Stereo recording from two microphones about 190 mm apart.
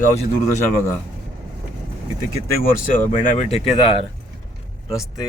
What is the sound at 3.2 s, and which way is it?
Speech, 40° left (ahead or behind).